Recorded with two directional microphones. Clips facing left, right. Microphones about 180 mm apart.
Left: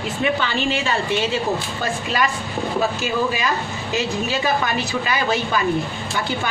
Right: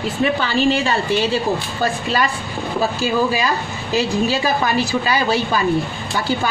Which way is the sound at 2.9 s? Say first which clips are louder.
Right 4 dB; 35° right (ahead or behind).